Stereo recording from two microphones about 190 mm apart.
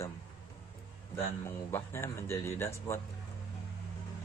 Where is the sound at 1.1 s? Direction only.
10° left (ahead or behind).